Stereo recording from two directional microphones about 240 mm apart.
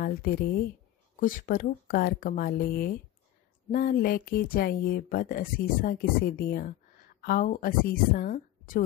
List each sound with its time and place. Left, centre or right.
0.0 s speech: left